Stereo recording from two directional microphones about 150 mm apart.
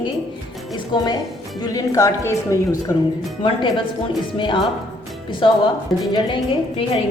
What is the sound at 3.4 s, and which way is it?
Speech, 35° left (ahead or behind).